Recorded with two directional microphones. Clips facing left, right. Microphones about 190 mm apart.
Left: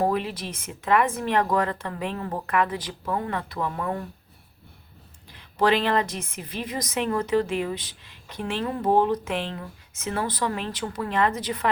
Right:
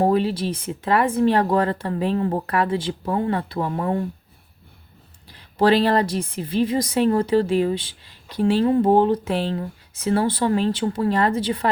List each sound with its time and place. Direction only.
0.0 s a woman's voice: 30° right (ahead or behind)
5.5 s a woman's voice: 35° right (ahead or behind)